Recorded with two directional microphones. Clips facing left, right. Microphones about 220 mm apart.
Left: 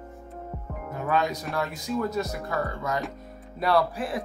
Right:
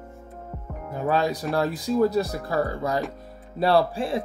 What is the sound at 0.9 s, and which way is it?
Speech, 30° right (ahead or behind).